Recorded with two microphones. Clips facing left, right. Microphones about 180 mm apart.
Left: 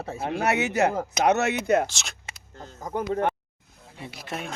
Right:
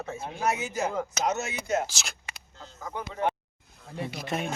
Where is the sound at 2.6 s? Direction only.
45° left (ahead or behind).